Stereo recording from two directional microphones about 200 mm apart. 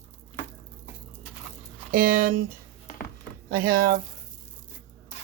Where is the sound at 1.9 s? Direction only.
45° right (ahead or behind).